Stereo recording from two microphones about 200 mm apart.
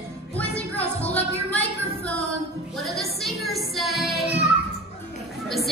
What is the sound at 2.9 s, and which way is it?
Child singing, centre (ahead or behind).